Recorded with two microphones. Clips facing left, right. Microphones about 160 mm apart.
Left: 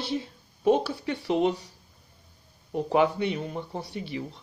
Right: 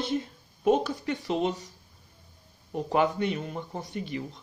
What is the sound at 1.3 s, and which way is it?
Speech, 10° left (ahead or behind).